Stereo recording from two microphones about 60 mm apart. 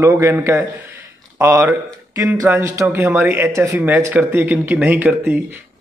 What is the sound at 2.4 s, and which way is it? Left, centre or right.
A man's voice, right.